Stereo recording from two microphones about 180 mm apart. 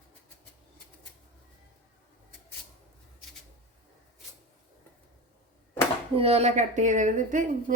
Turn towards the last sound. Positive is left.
turn(degrees=-45)  # may be behind; listen again after turning